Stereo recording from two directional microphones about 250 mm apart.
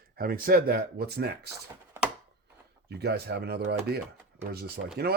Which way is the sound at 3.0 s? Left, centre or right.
Right.